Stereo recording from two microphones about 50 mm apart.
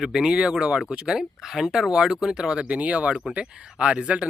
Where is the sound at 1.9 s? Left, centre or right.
Right.